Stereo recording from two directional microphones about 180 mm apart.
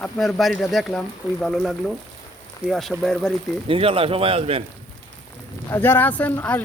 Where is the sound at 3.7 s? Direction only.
30° right (ahead or behind).